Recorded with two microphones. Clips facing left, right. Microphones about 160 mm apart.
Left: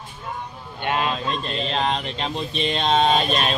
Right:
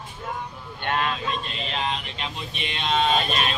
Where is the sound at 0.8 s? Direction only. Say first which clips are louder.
Left 2 dB; 10° left (ahead or behind).